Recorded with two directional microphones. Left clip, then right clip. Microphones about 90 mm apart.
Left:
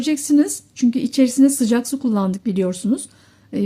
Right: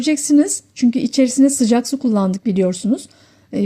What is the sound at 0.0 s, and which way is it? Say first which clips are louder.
Speech: right 2 dB; 35° right (ahead or behind).